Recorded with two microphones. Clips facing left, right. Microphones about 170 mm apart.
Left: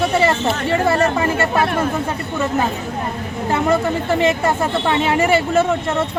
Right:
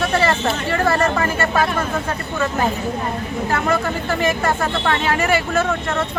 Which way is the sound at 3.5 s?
20° left (ahead or behind).